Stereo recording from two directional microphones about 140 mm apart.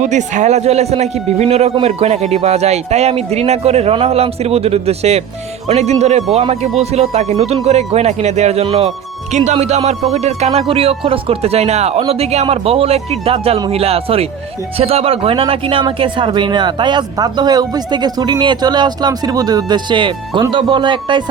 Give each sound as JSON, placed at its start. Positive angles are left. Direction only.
{"t": 0.0, "sound": "a man's voice", "side_deg": -60}